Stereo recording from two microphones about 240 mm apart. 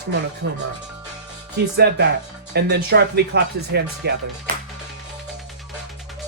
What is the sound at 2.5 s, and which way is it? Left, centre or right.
Speech, right.